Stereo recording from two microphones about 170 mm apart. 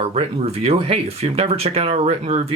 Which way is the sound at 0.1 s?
40° right (ahead or behind).